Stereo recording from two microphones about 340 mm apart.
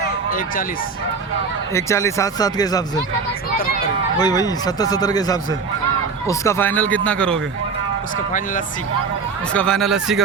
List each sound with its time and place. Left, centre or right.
1.7 s a man's voice: centre
4.2 s a man's voice: centre
8.3 s speech: left
9.5 s speech: centre